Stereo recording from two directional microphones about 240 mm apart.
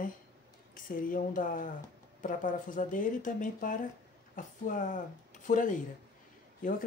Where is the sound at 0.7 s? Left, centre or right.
Left.